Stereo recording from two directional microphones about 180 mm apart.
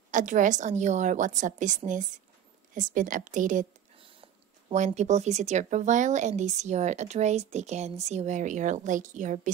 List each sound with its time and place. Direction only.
0.1 s a woman's voice: 45° right (ahead or behind)
4.0 s a woman's voice: 30° right (ahead or behind)